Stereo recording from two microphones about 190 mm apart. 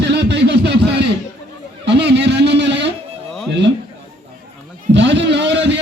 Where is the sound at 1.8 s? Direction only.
65° right (ahead or behind).